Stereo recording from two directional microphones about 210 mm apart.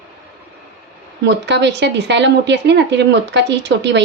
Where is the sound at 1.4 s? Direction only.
55° right (ahead or behind).